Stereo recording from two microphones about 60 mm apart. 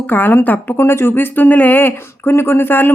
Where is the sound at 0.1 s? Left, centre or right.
Left.